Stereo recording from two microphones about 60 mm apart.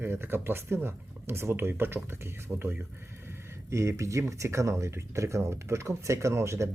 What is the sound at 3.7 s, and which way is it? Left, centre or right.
Speech, right.